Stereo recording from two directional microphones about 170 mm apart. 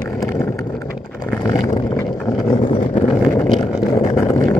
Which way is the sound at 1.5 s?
25° left (ahead or behind).